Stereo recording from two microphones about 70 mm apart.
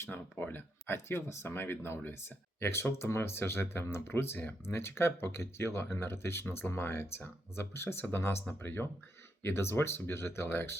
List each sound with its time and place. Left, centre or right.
0.1 s speech: left